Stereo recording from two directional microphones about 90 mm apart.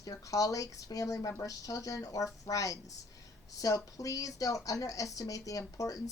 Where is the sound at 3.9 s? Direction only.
40° left (ahead or behind).